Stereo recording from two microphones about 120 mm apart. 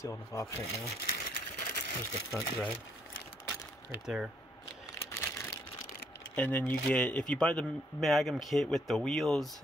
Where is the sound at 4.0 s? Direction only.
5° right (ahead or behind).